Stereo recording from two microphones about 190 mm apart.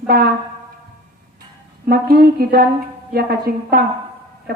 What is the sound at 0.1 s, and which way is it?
Speech, 50° right (ahead or behind).